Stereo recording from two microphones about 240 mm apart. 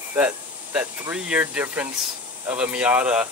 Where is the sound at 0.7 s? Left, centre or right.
Centre.